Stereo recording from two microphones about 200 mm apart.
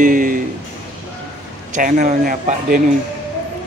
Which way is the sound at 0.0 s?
40° right (ahead or behind).